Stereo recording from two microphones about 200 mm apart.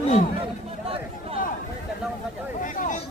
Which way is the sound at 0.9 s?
30° right (ahead or behind).